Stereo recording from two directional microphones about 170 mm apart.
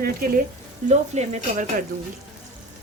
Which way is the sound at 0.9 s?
40° right (ahead or behind).